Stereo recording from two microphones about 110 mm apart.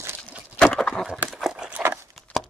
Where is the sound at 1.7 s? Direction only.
15° right (ahead or behind).